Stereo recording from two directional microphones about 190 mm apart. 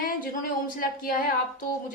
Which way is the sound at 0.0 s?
50° left (ahead or behind).